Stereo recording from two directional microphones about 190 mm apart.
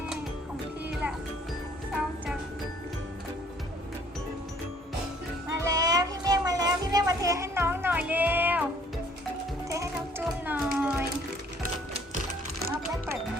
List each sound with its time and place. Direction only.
5.5 s music: 20° right (ahead or behind)
9.6 s music: 15° right (ahead or behind)
10.2 s a sound: 5° right (ahead or behind)